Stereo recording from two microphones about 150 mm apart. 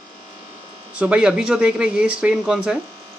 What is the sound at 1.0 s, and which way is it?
Speech, 5° right (ahead or behind).